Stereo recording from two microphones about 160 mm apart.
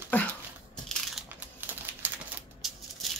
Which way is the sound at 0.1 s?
10° left (ahead or behind).